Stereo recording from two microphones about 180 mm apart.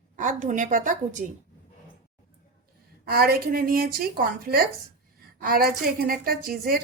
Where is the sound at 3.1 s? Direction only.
55° right (ahead or behind).